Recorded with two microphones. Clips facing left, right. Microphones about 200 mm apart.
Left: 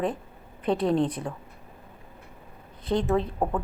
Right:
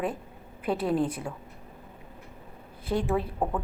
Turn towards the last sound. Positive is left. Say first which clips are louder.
# left 3 dB
turn(degrees=-10)  # may be behind; listen again after turning